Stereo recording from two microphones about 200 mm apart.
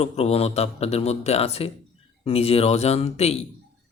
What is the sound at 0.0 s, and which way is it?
A man's voice, 30° left (ahead or behind).